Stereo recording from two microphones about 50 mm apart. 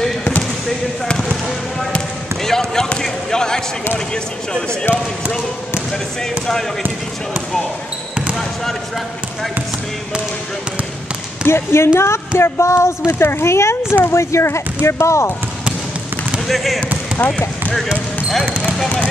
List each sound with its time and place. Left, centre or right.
2.4 s basketball bounce: centre
4.1 s speech: centre
11.4 s speech: left
16.4 s speech: centre